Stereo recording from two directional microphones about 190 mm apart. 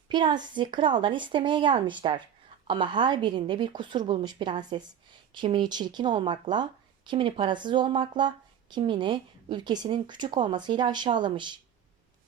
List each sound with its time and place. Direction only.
0.1 s speech: 25° right (ahead or behind)